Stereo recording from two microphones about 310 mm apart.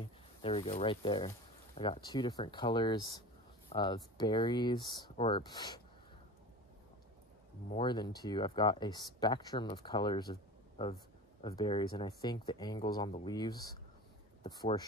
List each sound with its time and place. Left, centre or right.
0.4 s speech: centre
7.7 s speech: centre